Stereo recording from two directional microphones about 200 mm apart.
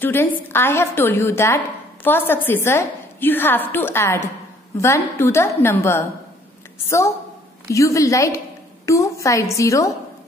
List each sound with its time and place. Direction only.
0.0 s a woman's voice: 10° left (ahead or behind)
7.7 s a woman's voice: 15° left (ahead or behind)